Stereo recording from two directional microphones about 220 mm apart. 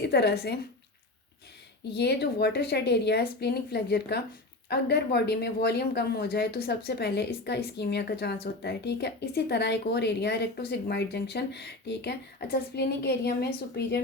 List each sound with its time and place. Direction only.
0.0 s a woman's voice: 50° left (ahead or behind)
1.9 s speech: 50° left (ahead or behind)